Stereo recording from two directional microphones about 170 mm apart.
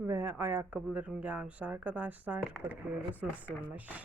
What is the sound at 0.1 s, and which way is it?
Speech, 15° right (ahead or behind).